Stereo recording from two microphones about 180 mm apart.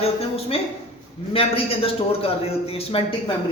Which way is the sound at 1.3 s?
30° left (ahead or behind).